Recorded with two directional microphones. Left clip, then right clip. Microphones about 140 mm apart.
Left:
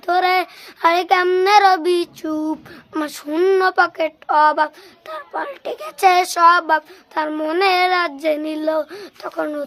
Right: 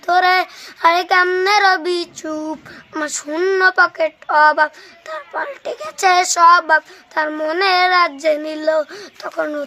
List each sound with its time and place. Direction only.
0.0 s speech: 30° left (ahead or behind)
2.9 s a sound: 40° left (ahead or behind)
8.2 s speech: 45° left (ahead or behind)